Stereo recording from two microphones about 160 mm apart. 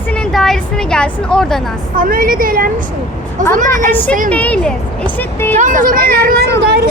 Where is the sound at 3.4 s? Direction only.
50° right (ahead or behind).